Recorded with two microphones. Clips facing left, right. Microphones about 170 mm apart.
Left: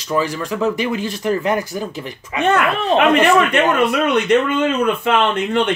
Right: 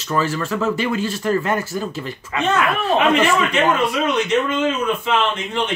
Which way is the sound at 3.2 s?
60° left (ahead or behind).